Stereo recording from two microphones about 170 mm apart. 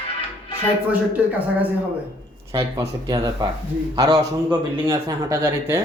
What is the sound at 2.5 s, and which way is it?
Speech, 20° right (ahead or behind).